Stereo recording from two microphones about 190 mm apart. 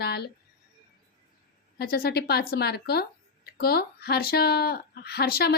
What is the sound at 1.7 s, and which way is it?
Speech, 55° left (ahead or behind).